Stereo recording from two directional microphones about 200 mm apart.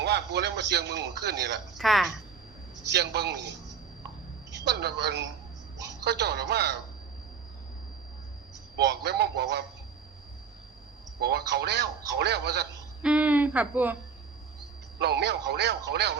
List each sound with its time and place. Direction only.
0.0 s a man's voice: 55° right (ahead or behind)
1.8 s speech: centre (ahead or behind)
2.9 s a man's voice: 55° right (ahead or behind)
4.5 s a man's voice: 55° right (ahead or behind)
8.7 s a man's voice: 55° right (ahead or behind)
11.2 s a man's voice: 55° right (ahead or behind)
13.0 s speech: 5° right (ahead or behind)
14.9 s a man's voice: 55° right (ahead or behind)